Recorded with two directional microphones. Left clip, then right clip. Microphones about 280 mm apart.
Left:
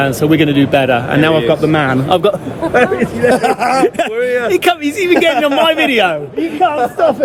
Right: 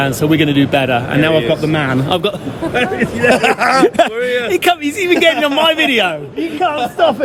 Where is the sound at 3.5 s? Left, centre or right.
Centre.